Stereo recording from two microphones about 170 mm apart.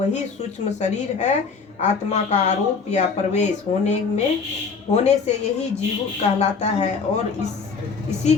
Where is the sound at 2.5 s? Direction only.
40° left (ahead or behind).